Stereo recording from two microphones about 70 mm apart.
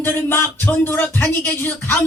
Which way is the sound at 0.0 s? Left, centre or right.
Left.